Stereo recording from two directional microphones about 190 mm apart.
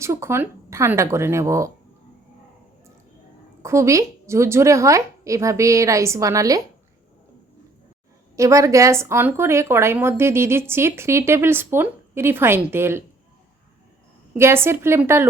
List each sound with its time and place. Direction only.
0.0 s a woman's voice: 15° right (ahead or behind)
3.6 s a woman's voice: 15° right (ahead or behind)
8.4 s a woman's voice: 15° right (ahead or behind)
14.3 s a woman's voice: 15° right (ahead or behind)